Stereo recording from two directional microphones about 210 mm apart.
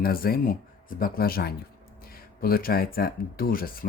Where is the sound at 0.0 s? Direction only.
45° left (ahead or behind).